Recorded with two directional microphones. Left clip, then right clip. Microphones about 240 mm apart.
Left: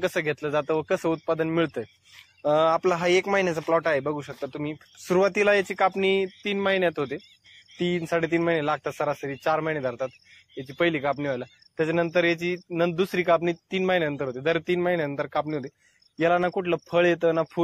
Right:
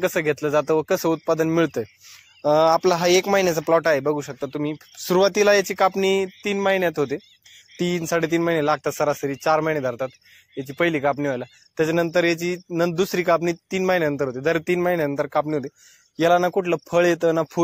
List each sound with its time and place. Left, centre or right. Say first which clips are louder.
0.0 s a man's voice: right 5 dB; right